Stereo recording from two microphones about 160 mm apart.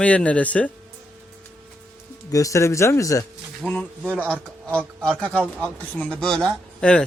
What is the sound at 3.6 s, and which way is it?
Speech, 5° left (ahead or behind).